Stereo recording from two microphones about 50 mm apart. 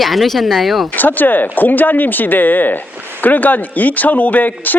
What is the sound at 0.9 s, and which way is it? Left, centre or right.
Speech, left.